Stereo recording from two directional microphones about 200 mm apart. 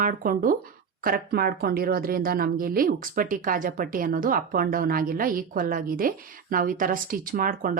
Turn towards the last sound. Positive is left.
turn(degrees=-45)  # may be behind; listen again after turning